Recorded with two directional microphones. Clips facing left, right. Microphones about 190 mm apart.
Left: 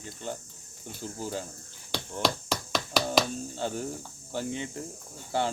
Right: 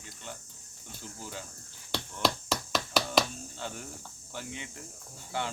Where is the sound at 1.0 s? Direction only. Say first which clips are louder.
Left 8 dB; 35° left (ahead or behind).